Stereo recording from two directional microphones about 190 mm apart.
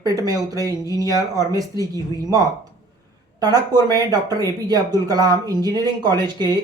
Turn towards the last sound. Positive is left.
turn(degrees=-20)  # may be behind; listen again after turning